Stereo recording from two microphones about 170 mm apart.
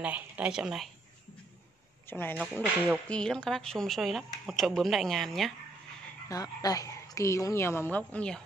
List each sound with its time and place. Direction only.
0.0 s speech: 5° right (ahead or behind)
2.0 s speech: 10° left (ahead or behind)
6.2 s a woman's voice: 20° left (ahead or behind)